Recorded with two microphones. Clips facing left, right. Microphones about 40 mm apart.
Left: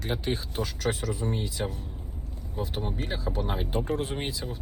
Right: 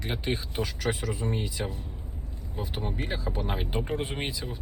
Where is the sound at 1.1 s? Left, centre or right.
Right.